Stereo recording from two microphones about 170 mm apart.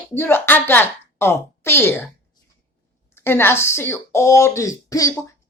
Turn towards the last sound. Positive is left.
turn(degrees=20)  # may be behind; listen again after turning